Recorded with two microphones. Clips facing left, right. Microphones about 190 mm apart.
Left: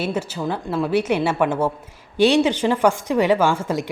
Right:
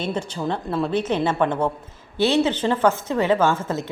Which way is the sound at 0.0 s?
10° left (ahead or behind).